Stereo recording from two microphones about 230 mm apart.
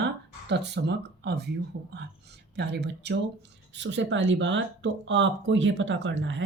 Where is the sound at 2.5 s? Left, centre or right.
Right.